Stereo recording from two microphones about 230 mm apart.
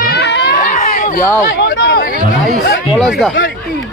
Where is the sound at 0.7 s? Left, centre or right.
Left.